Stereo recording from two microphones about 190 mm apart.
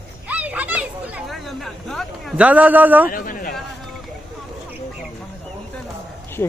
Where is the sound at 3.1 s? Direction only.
45° left (ahead or behind).